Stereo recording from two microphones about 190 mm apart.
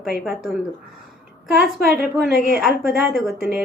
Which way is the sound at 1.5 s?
Centre (ahead or behind).